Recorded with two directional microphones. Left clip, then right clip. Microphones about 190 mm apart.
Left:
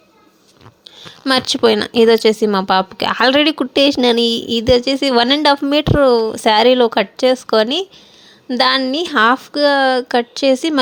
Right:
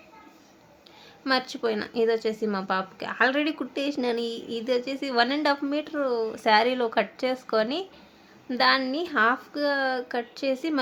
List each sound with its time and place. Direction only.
0.9 s speech: 40° left (ahead or behind)